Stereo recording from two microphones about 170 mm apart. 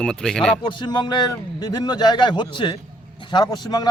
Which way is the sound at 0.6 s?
25° left (ahead or behind).